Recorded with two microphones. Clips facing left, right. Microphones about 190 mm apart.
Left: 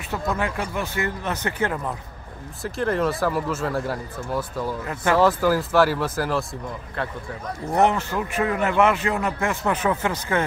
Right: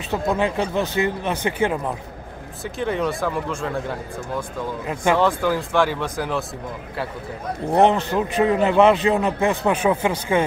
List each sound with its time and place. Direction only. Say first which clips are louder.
0.1 s a man's voice: right 4 dB; 20° right (ahead or behind)
2.6 s speech: left 1 dB; centre (ahead or behind)
4.8 s a man's voice: right 2 dB; 20° right (ahead or behind)
5.2 s speech: left 1 dB; 5° left (ahead or behind)
7.8 s a man's voice: right 3 dB; 20° right (ahead or behind)